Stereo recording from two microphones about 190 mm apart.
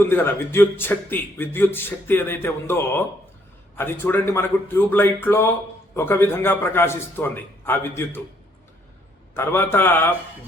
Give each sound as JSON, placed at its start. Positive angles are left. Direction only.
{"t": 0.1, "sound": "speech", "side_deg": 10}
{"t": 9.3, "sound": "speech", "side_deg": 10}